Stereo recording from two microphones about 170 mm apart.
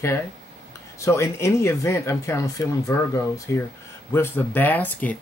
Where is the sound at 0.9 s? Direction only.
15° left (ahead or behind).